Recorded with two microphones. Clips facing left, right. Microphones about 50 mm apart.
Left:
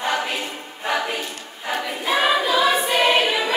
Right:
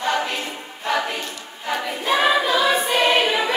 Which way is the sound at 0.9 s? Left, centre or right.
Centre.